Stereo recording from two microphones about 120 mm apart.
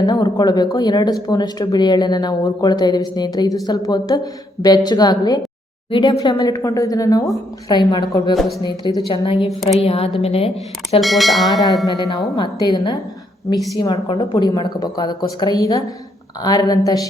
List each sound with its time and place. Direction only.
0.0 s a woman's voice: 35° left (ahead or behind)
8.4 s speech: centre (ahead or behind)
8.6 s a woman's voice: 35° left (ahead or behind)
9.0 s a woman's voice: 50° left (ahead or behind)
11.0 s speech: centre (ahead or behind)
11.9 s a woman's voice: 40° left (ahead or behind)